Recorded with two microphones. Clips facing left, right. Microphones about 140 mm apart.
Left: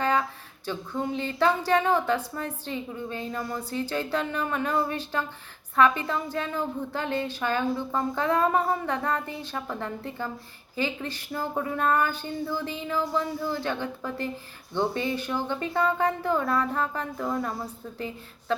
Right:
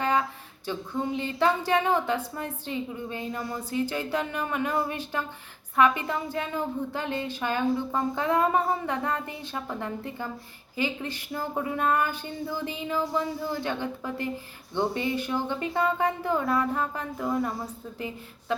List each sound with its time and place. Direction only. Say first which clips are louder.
0.0 s a woman's voice: even; 20° right (ahead or behind)